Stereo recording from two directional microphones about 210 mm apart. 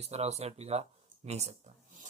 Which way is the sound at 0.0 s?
30° right (ahead or behind).